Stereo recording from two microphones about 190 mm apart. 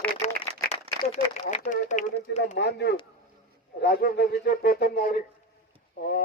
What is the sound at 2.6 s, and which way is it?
Speech, 60° left (ahead or behind).